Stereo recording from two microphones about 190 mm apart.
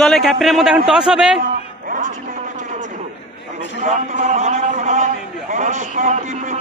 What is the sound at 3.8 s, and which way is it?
A man's voice, 35° right (ahead or behind).